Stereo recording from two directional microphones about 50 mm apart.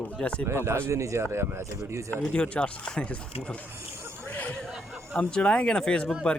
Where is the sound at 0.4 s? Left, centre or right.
Right.